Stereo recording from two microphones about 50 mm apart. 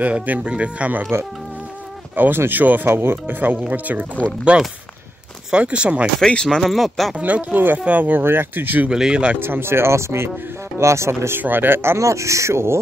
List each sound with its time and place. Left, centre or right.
0.0 s speech: right
2.1 s speech: right
2.9 s speech: right
3.7 s speech: right
4.5 s speech: centre
6.2 s speech: centre
6.6 s speech: centre
7.2 s speech: right
8.2 s speech: right
8.9 s speech: centre
9.4 s speech: right
10.8 s speech: right
11.4 s speech: right
12.0 s speech: right